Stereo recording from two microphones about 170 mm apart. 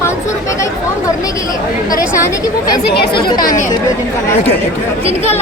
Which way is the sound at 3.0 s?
70° left (ahead or behind).